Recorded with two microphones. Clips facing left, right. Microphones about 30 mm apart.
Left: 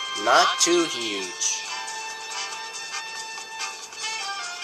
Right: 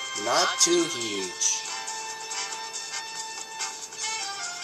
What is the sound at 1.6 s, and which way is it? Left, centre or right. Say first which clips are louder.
Music: left 3 dB; left.